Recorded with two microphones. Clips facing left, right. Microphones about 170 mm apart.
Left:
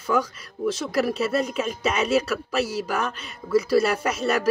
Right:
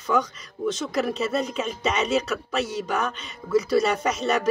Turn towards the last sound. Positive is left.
turn(degrees=5)  # may be behind; listen again after turning